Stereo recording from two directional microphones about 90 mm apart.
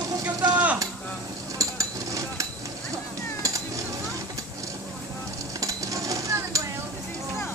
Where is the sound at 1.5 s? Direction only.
40° right (ahead or behind).